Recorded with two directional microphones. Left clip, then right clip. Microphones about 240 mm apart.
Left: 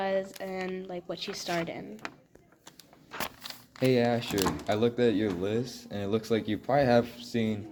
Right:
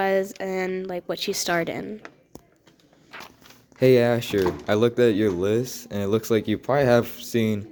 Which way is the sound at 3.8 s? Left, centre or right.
Right.